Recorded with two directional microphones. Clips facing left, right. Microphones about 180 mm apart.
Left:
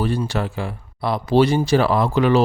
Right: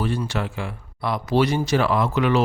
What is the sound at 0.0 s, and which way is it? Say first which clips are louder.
Speech: left 3 dB; 35° left (ahead or behind).